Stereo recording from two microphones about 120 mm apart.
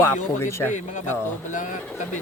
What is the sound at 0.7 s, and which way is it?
Speech, 90° left.